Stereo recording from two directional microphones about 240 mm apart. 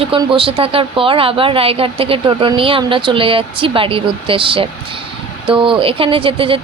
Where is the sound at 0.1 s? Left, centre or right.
Right.